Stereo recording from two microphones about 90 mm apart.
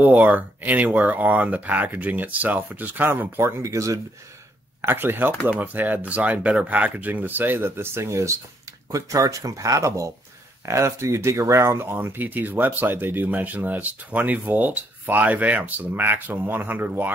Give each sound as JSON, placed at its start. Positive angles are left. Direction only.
{"t": 0.0, "sound": "speech", "side_deg": -20}
{"t": 3.7, "sound": "speech", "side_deg": -40}
{"t": 4.8, "sound": "speech", "side_deg": -25}